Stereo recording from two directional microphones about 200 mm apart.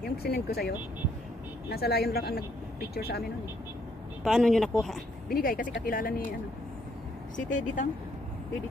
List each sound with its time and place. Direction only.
0.0 s speech: 50° left (ahead or behind)
4.2 s speech: centre (ahead or behind)
5.3 s speech: 45° left (ahead or behind)
7.3 s speech: 40° left (ahead or behind)